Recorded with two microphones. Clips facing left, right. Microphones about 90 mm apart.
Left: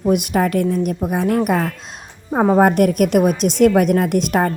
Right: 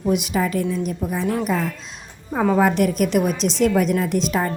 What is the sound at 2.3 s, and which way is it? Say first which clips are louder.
Speech: left 4 dB; 35° left (ahead or behind).